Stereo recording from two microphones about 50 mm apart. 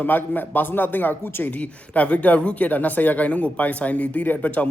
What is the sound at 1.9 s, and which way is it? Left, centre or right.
A man's voice, left.